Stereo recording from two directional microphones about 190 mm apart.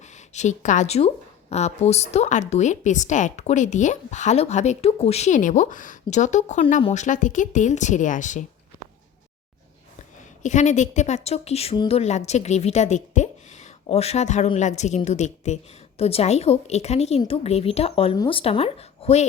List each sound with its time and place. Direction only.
0.0 s a woman's voice: 40° left (ahead or behind)
10.4 s a woman's voice: 40° left (ahead or behind)